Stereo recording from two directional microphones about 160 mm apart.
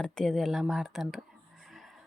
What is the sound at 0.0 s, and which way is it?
A woman's voice, 5° left (ahead or behind).